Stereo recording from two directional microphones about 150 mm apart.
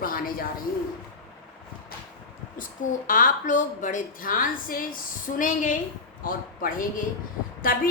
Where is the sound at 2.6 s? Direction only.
60° left (ahead or behind).